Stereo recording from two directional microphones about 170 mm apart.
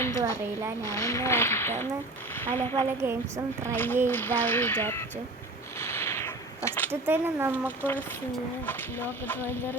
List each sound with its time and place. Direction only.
0.8 s speech: 20° left (ahead or behind)
3.0 s speech: 15° right (ahead or behind)
3.7 s speech: 10° left (ahead or behind)
5.8 s a sound: 15° left (ahead or behind)
6.7 s speech: 10° left (ahead or behind)
7.0 s speech: 15° right (ahead or behind)
8.6 s speech: 10° left (ahead or behind)